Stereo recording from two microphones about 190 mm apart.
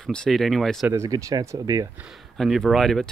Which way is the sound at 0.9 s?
15° right (ahead or behind).